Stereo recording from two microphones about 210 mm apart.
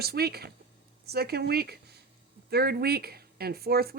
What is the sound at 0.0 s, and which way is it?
Speech, 50° right (ahead or behind).